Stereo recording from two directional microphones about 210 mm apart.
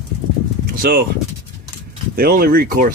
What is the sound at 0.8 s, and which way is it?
Speech, 45° right (ahead or behind).